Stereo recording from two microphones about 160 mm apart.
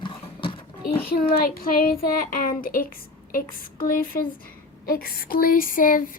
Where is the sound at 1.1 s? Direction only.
70° left (ahead or behind).